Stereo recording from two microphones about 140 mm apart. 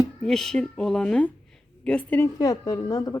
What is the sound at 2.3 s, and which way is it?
Speech, 25° left (ahead or behind).